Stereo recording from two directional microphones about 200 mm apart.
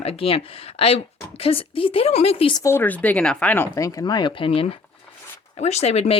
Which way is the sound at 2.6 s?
10° left (ahead or behind).